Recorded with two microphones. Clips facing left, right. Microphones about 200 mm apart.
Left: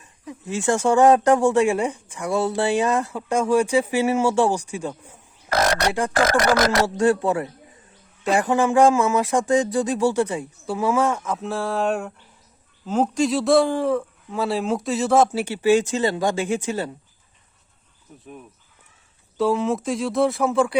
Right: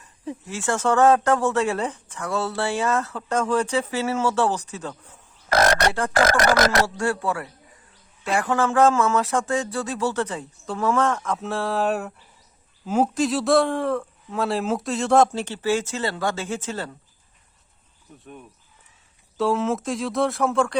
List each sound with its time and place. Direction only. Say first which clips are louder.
0.4 s speech: left 4 dB; 15° left (ahead or behind)
18.2 s speech: left 2 dB; 5° left (ahead or behind)